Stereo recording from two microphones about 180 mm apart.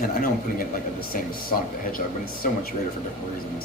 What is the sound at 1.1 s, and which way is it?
Speech, 55° left (ahead or behind).